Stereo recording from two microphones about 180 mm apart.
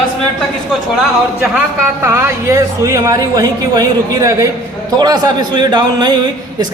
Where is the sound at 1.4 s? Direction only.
10° right (ahead or behind).